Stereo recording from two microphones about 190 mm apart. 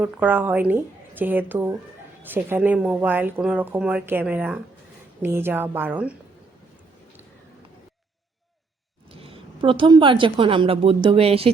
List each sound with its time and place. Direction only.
0.0 s speech: 10° right (ahead or behind)
9.1 s a woman's voice: 30° right (ahead or behind)